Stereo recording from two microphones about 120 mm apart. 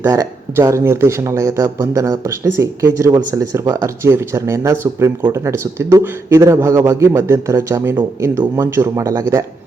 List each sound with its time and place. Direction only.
0.0 s speech: 30° right (ahead or behind)